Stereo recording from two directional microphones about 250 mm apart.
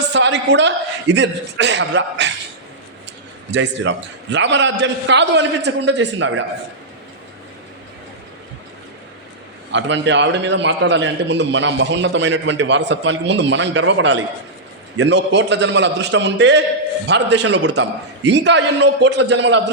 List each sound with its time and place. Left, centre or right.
0.1 s a man's voice: right
3.5 s a man's voice: right
9.7 s a man's voice: right